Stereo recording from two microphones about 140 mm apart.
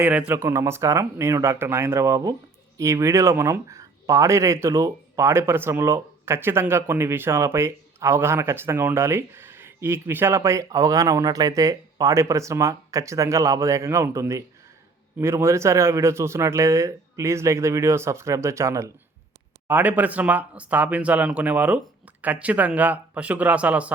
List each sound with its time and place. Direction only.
0.0 s speech: 10° right (ahead or behind)